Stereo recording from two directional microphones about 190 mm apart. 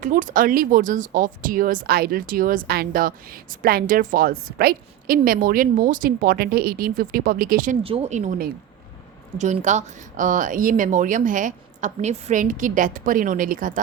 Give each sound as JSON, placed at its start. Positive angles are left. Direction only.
{"t": 0.0, "sound": "speech", "side_deg": -45}
{"t": 7.9, "sound": "speech", "side_deg": -35}